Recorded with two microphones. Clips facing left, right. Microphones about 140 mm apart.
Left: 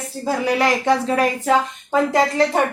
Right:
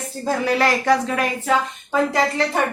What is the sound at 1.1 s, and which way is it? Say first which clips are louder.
Speech: left 4 dB; 35° left (ahead or behind).